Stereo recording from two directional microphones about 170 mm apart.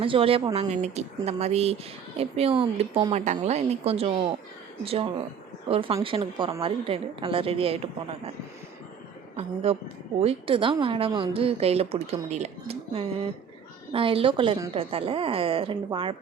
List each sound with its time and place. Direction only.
0.0 s a woman's voice: 30° right (ahead or behind)
5.6 s a woman's voice: 35° right (ahead or behind)
9.3 s a woman's voice: 40° right (ahead or behind)